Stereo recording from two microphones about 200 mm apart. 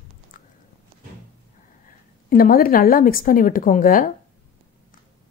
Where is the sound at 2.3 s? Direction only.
45° left (ahead or behind).